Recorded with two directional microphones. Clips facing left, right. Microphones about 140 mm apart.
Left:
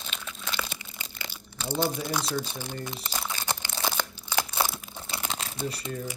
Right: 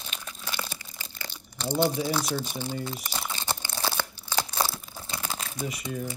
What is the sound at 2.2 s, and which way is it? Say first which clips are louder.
Speech: even; 10° right (ahead or behind).